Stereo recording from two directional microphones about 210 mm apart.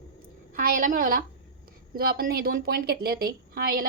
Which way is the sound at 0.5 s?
40° right (ahead or behind).